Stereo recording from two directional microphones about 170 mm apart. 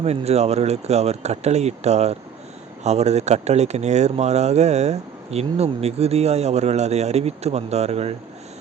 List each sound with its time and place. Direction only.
0.0 s speech: 40° right (ahead or behind)